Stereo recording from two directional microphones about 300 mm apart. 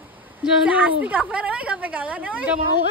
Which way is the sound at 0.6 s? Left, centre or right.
Centre.